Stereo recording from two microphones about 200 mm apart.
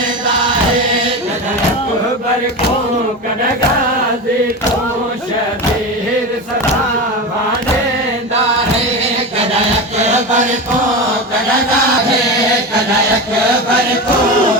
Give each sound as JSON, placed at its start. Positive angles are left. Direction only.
{"t": 10.0, "sound": "chant", "side_deg": -35}